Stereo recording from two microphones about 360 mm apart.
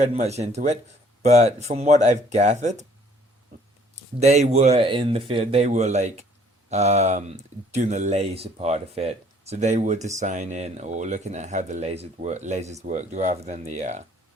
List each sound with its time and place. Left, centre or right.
0.0 s speech: centre
4.2 s speech: centre